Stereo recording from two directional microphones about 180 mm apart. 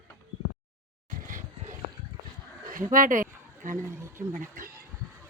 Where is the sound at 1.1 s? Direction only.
50° right (ahead or behind).